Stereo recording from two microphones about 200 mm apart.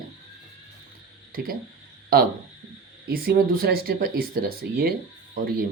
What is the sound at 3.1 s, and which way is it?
Speech, 45° right (ahead or behind).